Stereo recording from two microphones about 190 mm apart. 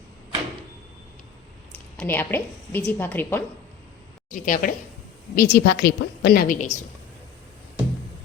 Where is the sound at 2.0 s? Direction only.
10° left (ahead or behind).